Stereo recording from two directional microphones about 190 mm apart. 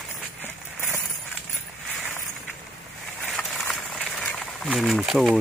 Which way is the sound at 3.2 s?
5° left (ahead or behind).